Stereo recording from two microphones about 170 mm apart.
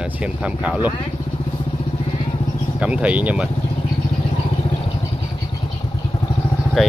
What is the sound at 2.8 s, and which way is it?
Speech, 5° right (ahead or behind).